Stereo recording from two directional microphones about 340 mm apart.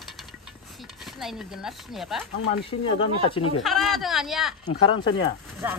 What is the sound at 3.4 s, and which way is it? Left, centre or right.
Speech, left.